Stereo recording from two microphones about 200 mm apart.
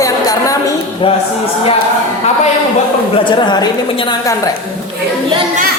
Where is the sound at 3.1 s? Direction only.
25° left (ahead or behind).